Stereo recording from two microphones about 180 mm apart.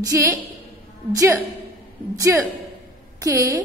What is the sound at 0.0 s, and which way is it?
A woman's voice, 15° right (ahead or behind).